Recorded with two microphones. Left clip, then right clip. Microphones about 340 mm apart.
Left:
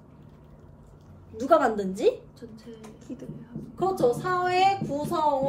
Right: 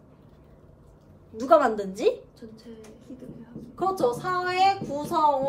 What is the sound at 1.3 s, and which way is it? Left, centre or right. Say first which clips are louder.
A woman's voice: right 2 dB; centre.